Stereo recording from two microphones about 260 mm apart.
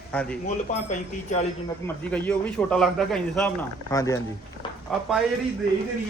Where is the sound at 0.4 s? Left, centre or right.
Left.